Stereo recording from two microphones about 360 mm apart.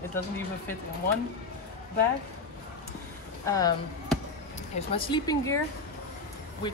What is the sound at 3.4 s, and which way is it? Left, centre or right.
A woman's voice, centre.